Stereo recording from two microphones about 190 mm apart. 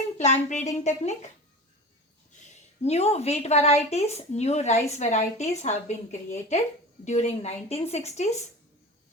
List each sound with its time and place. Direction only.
0.2 s a woman's voice: 40° left (ahead or behind)
2.8 s a woman's voice: 35° left (ahead or behind)